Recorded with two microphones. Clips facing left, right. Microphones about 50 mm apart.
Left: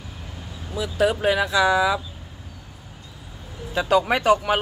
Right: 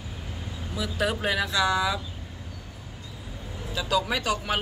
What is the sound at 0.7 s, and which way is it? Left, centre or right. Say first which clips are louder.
Speech: left 6 dB; centre.